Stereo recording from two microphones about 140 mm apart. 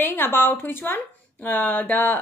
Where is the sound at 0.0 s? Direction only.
15° left (ahead or behind).